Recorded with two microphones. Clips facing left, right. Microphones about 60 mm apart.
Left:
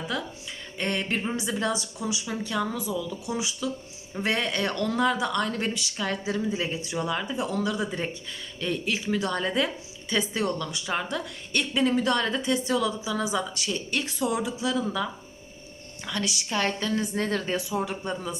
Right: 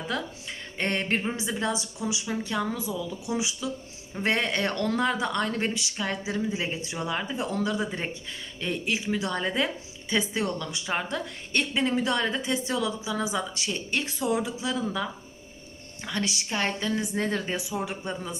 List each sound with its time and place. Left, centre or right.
0.1 s speech: right
1.4 s a woman's voice: right
16.0 s a woman's voice: right